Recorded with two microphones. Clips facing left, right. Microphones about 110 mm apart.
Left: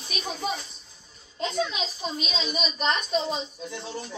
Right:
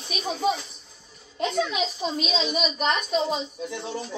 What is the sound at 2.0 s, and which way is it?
A woman's voice, 20° right (ahead or behind).